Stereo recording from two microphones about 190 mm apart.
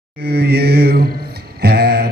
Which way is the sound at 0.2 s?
60° right (ahead or behind).